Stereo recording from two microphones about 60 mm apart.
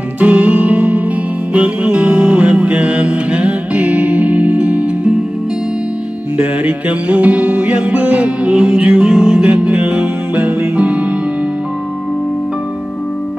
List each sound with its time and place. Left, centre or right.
0.2 s music: right
6.3 s music: right